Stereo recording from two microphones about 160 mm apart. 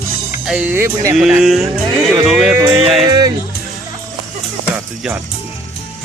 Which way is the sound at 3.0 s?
25° right (ahead or behind).